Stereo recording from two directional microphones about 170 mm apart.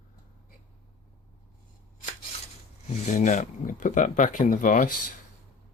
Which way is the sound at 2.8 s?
45° left (ahead or behind).